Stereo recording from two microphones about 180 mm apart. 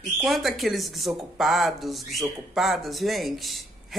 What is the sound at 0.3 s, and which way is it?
Speech, centre (ahead or behind).